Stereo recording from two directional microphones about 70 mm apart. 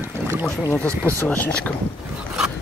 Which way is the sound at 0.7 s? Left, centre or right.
Right.